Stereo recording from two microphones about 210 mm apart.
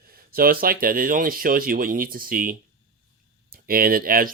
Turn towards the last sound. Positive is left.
turn(degrees=-45)  # may be behind; listen again after turning